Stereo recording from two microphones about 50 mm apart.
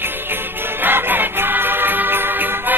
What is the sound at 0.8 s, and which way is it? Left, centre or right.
Music, right.